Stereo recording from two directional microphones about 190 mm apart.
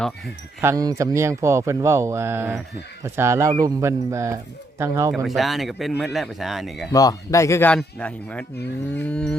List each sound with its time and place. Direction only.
0.6 s speech: 15° right (ahead or behind)
5.1 s speech: centre (ahead or behind)
6.9 s speech: 20° left (ahead or behind)